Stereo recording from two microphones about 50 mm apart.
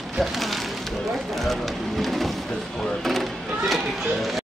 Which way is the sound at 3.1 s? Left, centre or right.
Centre.